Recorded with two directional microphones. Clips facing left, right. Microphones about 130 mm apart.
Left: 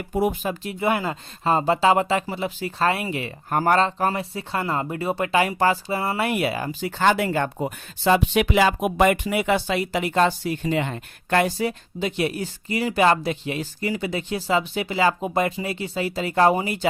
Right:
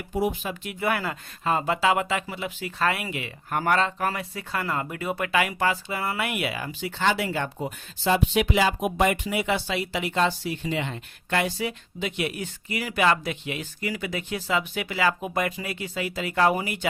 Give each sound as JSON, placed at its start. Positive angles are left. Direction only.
{"t": 0.1, "sound": "speech", "side_deg": 50}
{"t": 0.6, "sound": "speech", "side_deg": 30}